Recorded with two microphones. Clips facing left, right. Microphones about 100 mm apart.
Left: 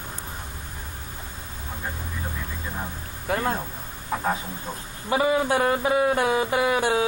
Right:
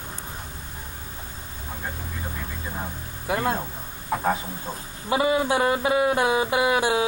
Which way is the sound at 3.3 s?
15° right (ahead or behind).